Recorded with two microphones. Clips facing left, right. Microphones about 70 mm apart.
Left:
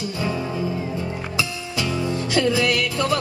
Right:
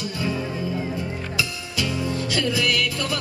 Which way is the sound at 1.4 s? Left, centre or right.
Left.